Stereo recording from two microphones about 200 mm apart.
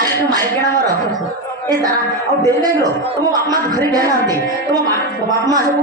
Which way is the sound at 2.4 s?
20° right (ahead or behind).